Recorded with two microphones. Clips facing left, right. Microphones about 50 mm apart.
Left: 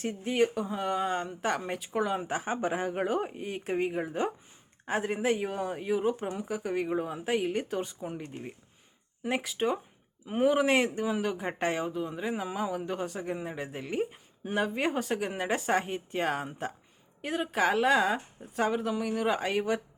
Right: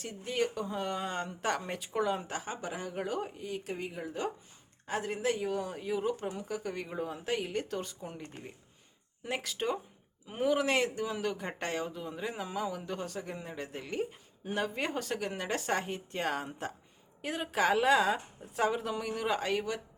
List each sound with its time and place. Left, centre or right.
0.0 s speech: left
2.4 s a woman's voice: left; by 19.6 s centre